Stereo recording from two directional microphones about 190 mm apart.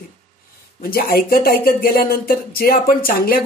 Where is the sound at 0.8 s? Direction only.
50° left (ahead or behind).